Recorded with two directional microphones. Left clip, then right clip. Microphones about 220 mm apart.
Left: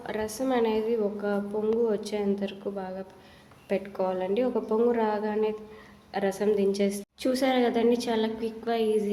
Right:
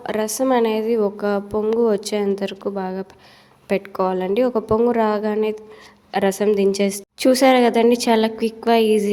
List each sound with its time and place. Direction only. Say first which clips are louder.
0.0 s a woman's voice: right 10 dB; 40° right (ahead or behind)